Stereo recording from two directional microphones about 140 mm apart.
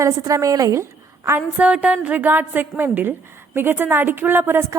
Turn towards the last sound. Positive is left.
turn(degrees=-15)  # may be behind; listen again after turning